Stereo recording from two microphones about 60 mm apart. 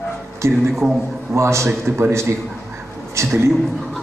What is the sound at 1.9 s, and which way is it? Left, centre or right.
Speech, right.